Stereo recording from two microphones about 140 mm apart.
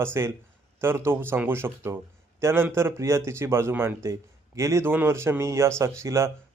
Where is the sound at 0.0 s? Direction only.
20° right (ahead or behind).